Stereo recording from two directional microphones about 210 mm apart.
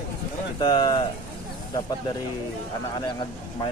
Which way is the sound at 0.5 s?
20° left (ahead or behind).